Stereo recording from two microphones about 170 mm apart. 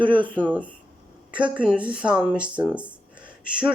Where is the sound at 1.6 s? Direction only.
5° right (ahead or behind).